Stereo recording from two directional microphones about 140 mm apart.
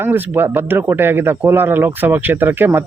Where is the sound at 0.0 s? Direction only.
15° right (ahead or behind).